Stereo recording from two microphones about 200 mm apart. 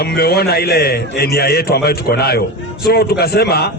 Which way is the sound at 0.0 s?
50° left (ahead or behind).